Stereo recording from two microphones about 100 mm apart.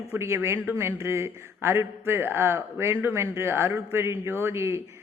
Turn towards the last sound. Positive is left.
turn(degrees=-25)  # may be behind; listen again after turning